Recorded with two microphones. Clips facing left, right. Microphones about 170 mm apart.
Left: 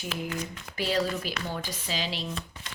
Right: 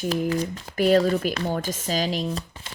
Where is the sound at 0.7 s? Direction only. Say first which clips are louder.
Right 9 dB; 50° right (ahead or behind); by 2.8 s 30° right (ahead or behind).